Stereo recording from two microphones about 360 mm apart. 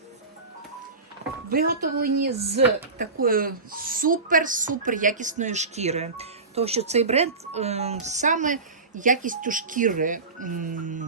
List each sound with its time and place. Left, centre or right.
1.5 s a woman's voice: right